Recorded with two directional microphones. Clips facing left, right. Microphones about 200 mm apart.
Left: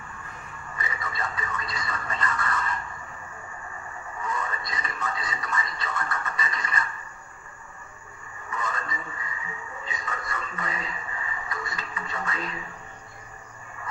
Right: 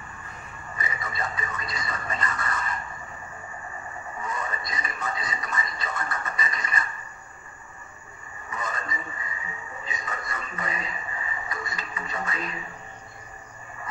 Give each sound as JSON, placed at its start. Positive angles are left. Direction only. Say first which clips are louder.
{"t": 0.7, "sound": "television", "louder": "right 1 dB", "side_deg": -20}
{"t": 4.2, "sound": "television", "louder": "left 1 dB", "side_deg": -25}
{"t": 8.5, "sound": "a sound", "louder": "left 1 dB", "side_deg": -20}